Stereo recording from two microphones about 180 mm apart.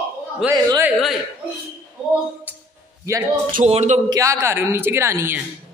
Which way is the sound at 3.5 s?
40° right (ahead or behind).